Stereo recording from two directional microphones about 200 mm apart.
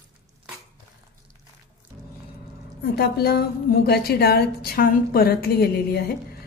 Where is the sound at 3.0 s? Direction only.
55° left (ahead or behind).